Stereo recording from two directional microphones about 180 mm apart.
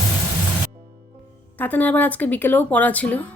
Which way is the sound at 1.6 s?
10° left (ahead or behind).